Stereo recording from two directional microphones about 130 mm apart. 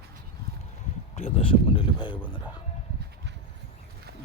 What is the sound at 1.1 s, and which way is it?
Speech, 50° left (ahead or behind).